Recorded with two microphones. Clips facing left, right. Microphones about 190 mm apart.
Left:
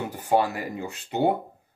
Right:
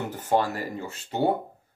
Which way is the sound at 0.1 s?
10° left (ahead or behind).